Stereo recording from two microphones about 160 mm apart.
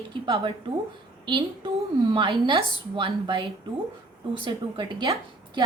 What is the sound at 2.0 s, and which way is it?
A woman's voice, 30° right (ahead or behind).